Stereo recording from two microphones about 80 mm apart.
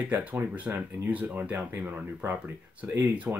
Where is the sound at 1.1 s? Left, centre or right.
Centre.